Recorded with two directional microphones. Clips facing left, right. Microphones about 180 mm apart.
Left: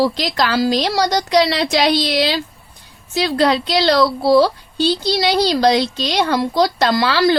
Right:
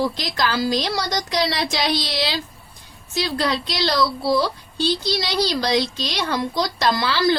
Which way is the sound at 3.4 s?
70° left (ahead or behind).